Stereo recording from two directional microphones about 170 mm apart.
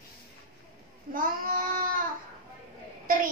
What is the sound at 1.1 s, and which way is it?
Child singing, 55° right (ahead or behind).